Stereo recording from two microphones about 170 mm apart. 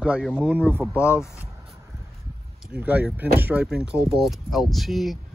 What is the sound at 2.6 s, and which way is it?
Speech, 10° right (ahead or behind).